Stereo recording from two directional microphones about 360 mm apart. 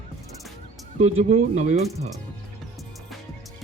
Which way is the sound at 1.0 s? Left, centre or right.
Centre.